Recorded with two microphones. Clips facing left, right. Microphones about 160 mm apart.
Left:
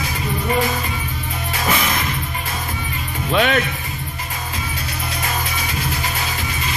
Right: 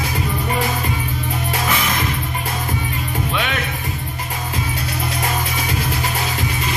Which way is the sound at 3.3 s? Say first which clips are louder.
Left 9 dB; 40° left (ahead or behind).